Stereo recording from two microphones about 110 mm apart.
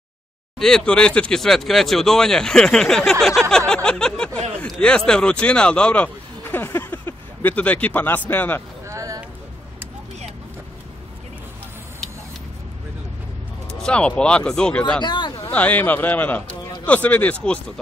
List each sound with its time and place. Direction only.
0.6 s speech: 5° left (ahead or behind)
8.8 s a sound: 30° right (ahead or behind)
13.7 s speech: 10° left (ahead or behind)
15.0 s speech: 45° left (ahead or behind)
15.5 s speech: 15° left (ahead or behind)